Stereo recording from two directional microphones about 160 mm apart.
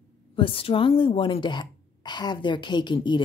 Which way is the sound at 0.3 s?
35° left (ahead or behind).